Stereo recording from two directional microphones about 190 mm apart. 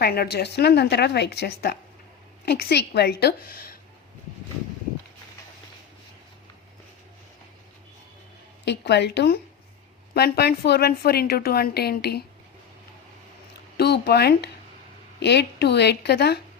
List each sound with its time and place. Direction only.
0.0 s a woman's voice: 55° left (ahead or behind)
8.6 s a woman's voice: 65° left (ahead or behind)
13.7 s a woman's voice: 60° left (ahead or behind)